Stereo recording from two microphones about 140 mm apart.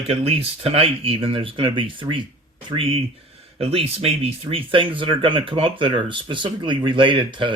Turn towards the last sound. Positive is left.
turn(degrees=-35)  # may be behind; listen again after turning